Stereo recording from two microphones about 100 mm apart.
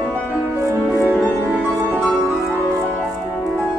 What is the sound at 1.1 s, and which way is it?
Music, 20° left (ahead or behind).